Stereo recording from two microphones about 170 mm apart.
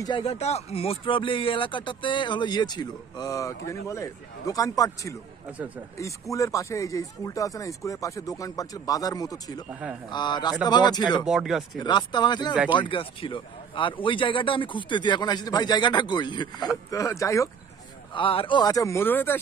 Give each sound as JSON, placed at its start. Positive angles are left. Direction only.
{"t": 0.0, "sound": "speech", "side_deg": 30}
{"t": 6.3, "sound": "speech", "side_deg": 20}
{"t": 9.7, "sound": "speech", "side_deg": -5}
{"t": 10.0, "sound": "speech", "side_deg": 25}
{"t": 11.2, "sound": "speech", "side_deg": 0}
{"t": 11.8, "sound": "speech", "side_deg": 25}
{"t": 18.1, "sound": "speech", "side_deg": 30}